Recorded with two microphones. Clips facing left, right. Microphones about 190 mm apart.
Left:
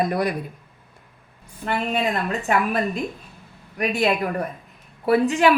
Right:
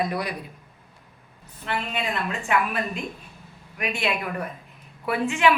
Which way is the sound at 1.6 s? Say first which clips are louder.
Left 6 dB; 45° left (ahead or behind).